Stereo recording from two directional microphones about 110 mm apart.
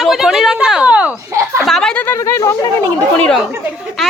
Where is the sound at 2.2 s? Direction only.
30° left (ahead or behind).